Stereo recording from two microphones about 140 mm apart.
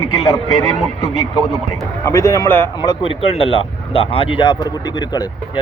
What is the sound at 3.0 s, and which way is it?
Speech, 40° left (ahead or behind).